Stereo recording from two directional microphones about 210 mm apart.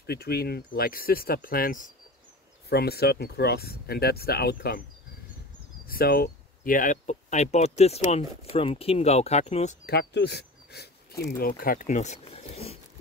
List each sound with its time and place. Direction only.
0.0 s speech: 50° left (ahead or behind)
5.9 s speech: 45° left (ahead or behind)
9.8 s speech: 50° left (ahead or behind); by 12.7 s 30° left (ahead or behind)